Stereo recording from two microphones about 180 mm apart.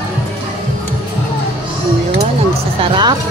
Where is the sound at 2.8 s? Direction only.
30° right (ahead or behind).